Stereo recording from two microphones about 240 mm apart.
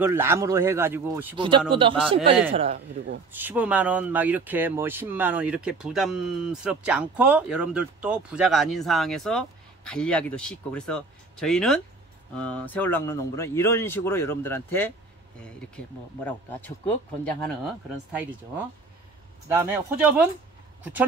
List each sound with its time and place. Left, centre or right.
0.0 s a man's voice: centre
3.3 s speech: centre
16.3 s speech: centre
19.5 s speech: centre